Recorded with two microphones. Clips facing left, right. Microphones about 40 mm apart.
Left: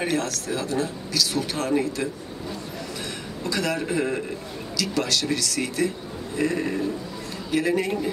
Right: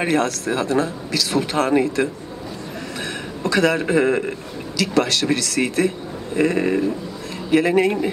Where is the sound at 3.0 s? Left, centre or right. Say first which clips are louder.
Right 9 dB; right.